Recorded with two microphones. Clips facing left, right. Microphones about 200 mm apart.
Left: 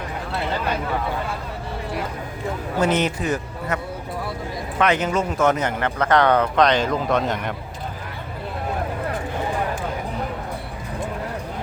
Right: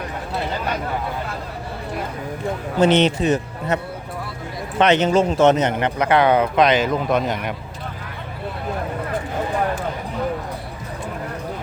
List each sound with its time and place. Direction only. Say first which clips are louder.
2.8 s speech: right 6 dB; 25° right (ahead or behind)
4.8 s speech: right 5 dB; 25° right (ahead or behind); by 7.5 s 5° right (ahead or behind)